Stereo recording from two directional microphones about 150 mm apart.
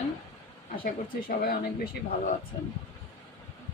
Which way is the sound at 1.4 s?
90° left.